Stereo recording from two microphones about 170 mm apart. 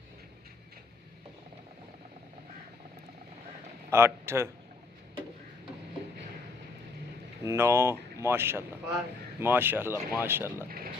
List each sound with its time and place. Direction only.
3.8 s a man's voice: 15° right (ahead or behind)
7.4 s speech: 15° right (ahead or behind)
10.7 s a sound: 60° right (ahead or behind)